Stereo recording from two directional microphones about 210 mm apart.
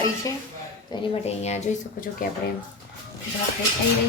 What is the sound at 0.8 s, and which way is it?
A woman's voice, 30° left (ahead or behind).